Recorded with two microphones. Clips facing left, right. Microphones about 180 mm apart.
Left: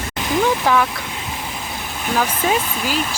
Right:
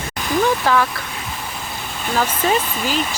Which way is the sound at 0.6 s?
10° left (ahead or behind).